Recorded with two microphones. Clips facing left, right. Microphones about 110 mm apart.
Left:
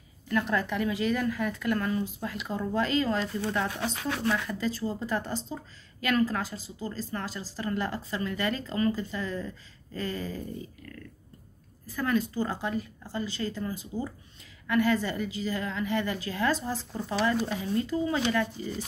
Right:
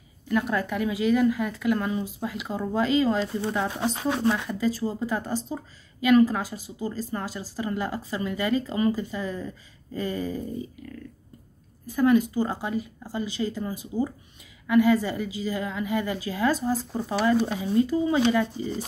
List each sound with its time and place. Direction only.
0.3 s speech: 10° right (ahead or behind)
11.8 s speech: 15° right (ahead or behind)